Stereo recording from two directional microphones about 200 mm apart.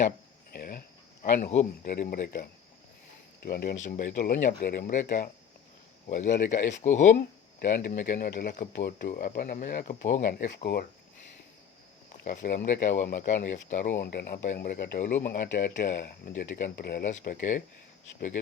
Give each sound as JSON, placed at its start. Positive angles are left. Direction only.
{"t": 0.5, "sound": "a sound", "side_deg": 50}
{"t": 1.2, "sound": "speech", "side_deg": 35}
{"t": 12.2, "sound": "speech", "side_deg": 40}